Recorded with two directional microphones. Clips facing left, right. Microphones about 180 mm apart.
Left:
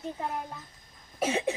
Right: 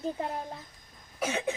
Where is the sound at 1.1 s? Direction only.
25° left (ahead or behind).